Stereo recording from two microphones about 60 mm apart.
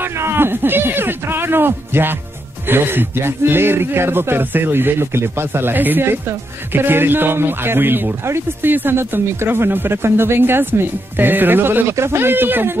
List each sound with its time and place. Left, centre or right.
0.2 s speech: right